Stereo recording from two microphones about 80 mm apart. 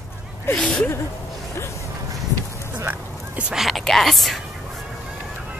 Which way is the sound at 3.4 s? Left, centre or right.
Centre.